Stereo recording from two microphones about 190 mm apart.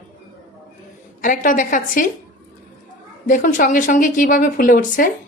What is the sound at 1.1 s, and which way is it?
Speech, 45° left (ahead or behind).